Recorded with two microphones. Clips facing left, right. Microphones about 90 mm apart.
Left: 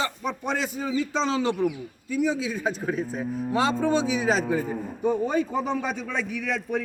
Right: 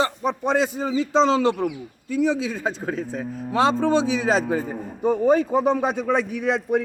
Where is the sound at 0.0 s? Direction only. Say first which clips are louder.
Right 6 dB; 35° right (ahead or behind).